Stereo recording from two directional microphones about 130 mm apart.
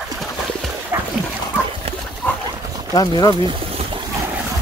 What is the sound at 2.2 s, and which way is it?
Dog, 10° left (ahead or behind).